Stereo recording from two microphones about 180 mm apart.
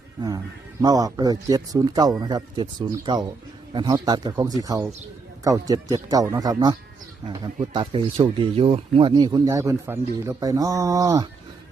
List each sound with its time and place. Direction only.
0.8 s speech: 20° right (ahead or behind)